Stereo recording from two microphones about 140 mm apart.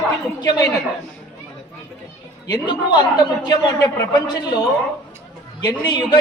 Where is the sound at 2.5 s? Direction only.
30° left (ahead or behind).